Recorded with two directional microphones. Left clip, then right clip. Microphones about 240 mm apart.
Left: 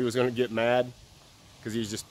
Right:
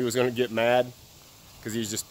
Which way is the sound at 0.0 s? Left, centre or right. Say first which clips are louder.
Right 1 dB; centre.